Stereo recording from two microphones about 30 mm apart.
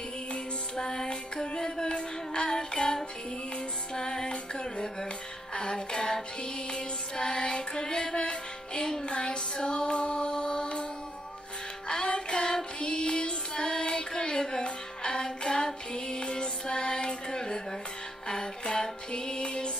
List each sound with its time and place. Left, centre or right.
0.7 s music: left
11.9 s music: left
12.8 s child singing: left
18.3 s music: left